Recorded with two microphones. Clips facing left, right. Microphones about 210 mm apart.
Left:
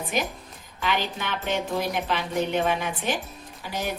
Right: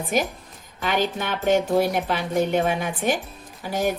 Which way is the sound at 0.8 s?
45° right (ahead or behind).